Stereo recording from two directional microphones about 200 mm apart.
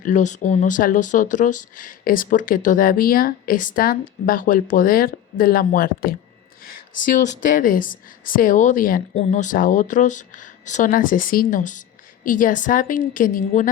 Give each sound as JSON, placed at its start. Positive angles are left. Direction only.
{"t": 0.0, "sound": "speech", "side_deg": 40}